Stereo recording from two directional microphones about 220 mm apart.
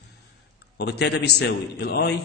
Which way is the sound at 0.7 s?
50° left (ahead or behind).